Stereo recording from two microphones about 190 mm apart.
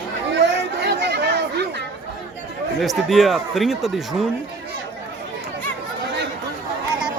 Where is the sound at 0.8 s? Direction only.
60° right (ahead or behind).